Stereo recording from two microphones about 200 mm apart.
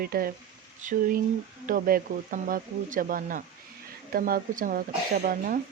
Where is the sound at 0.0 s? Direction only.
45° right (ahead or behind).